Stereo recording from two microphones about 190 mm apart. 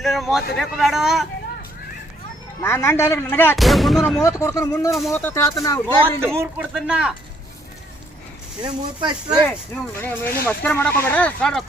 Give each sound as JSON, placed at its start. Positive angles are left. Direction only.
{"t": 0.0, "sound": "speech", "side_deg": 0}
{"t": 2.6, "sound": "speech", "side_deg": 15}
{"t": 3.5, "sound": "speech", "side_deg": 0}
{"t": 4.2, "sound": "speech", "side_deg": 15}
{"t": 6.1, "sound": "a man's voice", "side_deg": -15}
{"t": 8.6, "sound": "speech", "side_deg": -25}
{"t": 9.5, "sound": "speech", "side_deg": 10}